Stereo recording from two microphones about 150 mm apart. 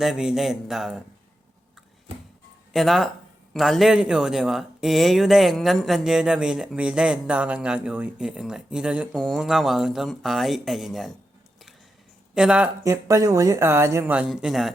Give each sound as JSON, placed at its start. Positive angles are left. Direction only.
{"t": 0.0, "sound": "speech", "side_deg": -5}
{"t": 2.7, "sound": "speech", "side_deg": 0}
{"t": 12.3, "sound": "speech", "side_deg": -5}
{"t": 12.8, "sound": "speech", "side_deg": -20}